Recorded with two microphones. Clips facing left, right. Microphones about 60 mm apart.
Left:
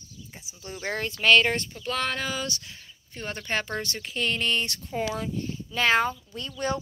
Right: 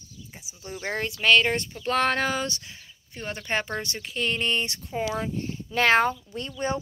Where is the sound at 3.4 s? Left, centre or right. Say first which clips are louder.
Right 1 dB; right.